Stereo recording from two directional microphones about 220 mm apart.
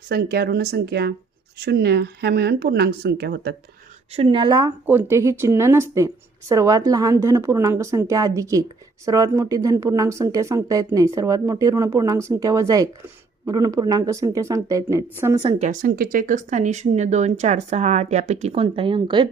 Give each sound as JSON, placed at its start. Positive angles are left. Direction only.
{"t": 0.1, "sound": "speech", "side_deg": -45}
{"t": 4.1, "sound": "speech", "side_deg": -25}